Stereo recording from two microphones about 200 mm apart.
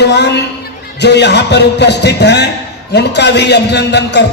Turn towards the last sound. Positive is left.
turn(degrees=60)  # may be behind; listen again after turning